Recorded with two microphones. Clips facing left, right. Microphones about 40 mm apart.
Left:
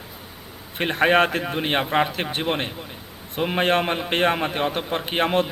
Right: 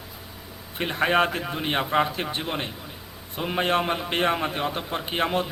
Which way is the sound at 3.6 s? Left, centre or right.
Left.